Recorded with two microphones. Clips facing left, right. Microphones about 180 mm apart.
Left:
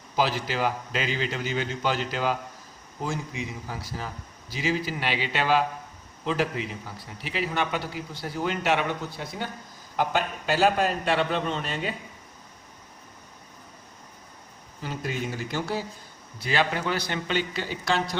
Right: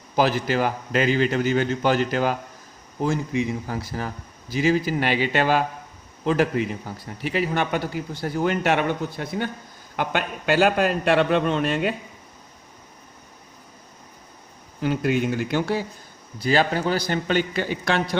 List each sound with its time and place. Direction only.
0.2 s a man's voice: 50° right (ahead or behind)
14.8 s a man's voice: 65° right (ahead or behind)
16.4 s a man's voice: 40° right (ahead or behind); by 18.2 s 60° right (ahead or behind)